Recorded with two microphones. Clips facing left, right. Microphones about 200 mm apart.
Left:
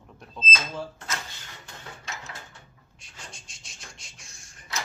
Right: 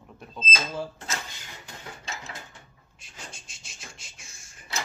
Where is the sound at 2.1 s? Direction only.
25° right (ahead or behind).